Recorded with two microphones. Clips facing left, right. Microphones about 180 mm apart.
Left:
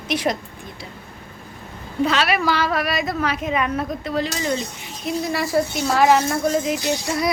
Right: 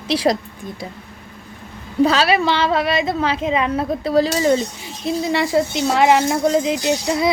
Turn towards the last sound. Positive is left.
turn(degrees=-25)  # may be behind; listen again after turning